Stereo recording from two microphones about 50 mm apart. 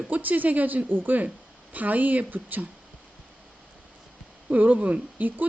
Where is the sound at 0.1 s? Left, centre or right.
Right.